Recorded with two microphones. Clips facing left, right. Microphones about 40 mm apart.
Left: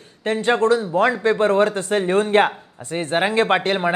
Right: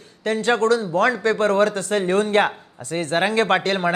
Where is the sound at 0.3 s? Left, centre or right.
Left.